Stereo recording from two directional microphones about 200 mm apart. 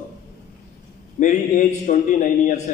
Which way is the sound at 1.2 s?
40° left (ahead or behind).